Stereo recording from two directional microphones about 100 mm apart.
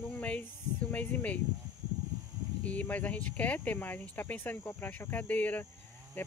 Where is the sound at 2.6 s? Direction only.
15° left (ahead or behind).